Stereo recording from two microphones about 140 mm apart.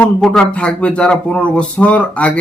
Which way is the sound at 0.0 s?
5° left (ahead or behind).